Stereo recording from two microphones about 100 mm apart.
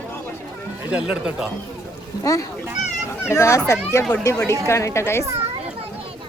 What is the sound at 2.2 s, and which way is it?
A child's voice, 35° left (ahead or behind).